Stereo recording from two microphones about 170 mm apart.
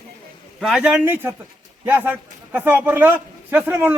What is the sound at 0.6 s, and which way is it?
A man's voice, 5° right (ahead or behind).